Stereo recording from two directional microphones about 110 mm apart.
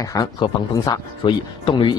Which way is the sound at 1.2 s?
50° left (ahead or behind).